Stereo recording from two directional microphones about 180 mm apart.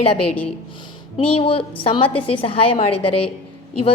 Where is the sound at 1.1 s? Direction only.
30° left (ahead or behind).